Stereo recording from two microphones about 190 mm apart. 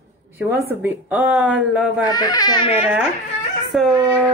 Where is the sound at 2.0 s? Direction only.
20° left (ahead or behind).